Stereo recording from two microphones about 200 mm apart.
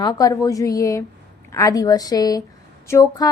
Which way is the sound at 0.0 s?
20° left (ahead or behind).